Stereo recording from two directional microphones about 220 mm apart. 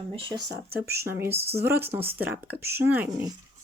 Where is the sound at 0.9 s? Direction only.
10° right (ahead or behind).